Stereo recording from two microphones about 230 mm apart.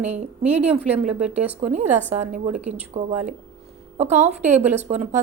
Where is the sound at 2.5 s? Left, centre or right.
Centre.